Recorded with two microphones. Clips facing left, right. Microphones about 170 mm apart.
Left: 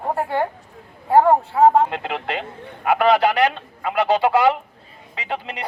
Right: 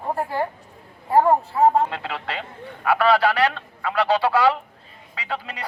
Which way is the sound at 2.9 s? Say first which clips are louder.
Left 2 dB; 20° left (ahead or behind).